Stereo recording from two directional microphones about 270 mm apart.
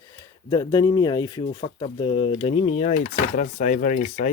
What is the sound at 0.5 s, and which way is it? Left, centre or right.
Speech, centre.